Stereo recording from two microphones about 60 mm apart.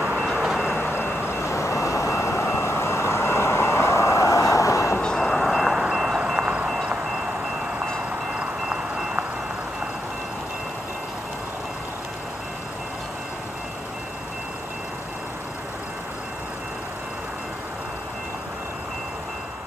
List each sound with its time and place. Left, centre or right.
0.4 s vehicle: centre
0.7 s vehicle: left
5.2 s wind chime: centre
8.4 s wind chime: centre